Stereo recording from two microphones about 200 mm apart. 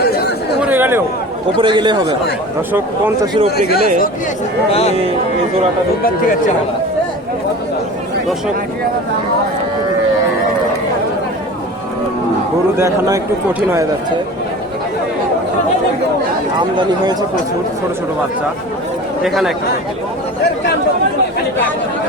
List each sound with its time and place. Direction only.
0.6 s a sound: 10° right (ahead or behind)
1.5 s speech: 25° right (ahead or behind)
3.7 s speech: 50° left (ahead or behind)
4.7 s speech: 30° left (ahead or behind)
16.6 s speech: 20° right (ahead or behind)
19.2 s speech: centre (ahead or behind)